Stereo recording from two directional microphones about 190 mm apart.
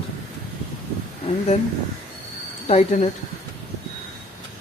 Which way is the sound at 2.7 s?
35° left (ahead or behind).